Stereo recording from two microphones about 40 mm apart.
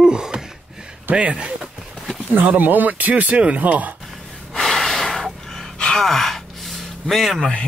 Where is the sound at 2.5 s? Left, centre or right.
Right.